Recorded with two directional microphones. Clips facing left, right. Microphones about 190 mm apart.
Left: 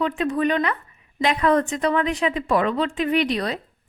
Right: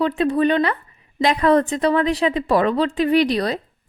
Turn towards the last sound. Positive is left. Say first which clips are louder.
# right 4 dB
turn(degrees=-35)  # may be behind; listen again after turning